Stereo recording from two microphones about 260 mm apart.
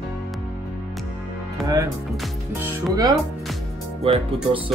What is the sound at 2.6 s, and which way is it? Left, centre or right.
Speech, centre.